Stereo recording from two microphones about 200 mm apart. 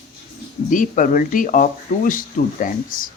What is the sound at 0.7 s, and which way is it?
Speech, 40° left (ahead or behind).